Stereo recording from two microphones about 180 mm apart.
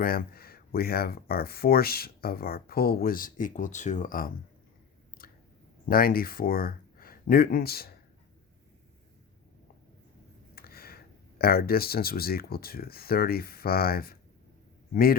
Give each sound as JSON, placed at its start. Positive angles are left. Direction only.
{"t": 0.0, "sound": "speech", "side_deg": 55}
{"t": 5.2, "sound": "squish", "side_deg": 55}
{"t": 5.9, "sound": "speech", "side_deg": 55}
{"t": 10.5, "sound": "speech", "side_deg": 55}